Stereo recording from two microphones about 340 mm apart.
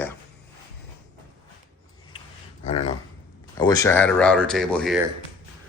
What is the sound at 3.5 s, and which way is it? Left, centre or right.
Speech, centre.